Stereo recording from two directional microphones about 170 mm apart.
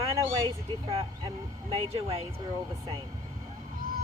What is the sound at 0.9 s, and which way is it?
Speech, 35° right (ahead or behind).